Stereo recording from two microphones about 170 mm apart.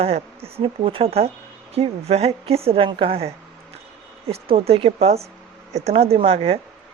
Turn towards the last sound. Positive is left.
turn(degrees=-35)  # may be behind; listen again after turning